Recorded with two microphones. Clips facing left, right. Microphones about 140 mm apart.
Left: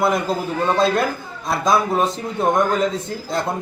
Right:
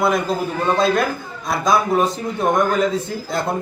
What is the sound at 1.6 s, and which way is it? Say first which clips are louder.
Speech: right 1 dB; centre (ahead or behind).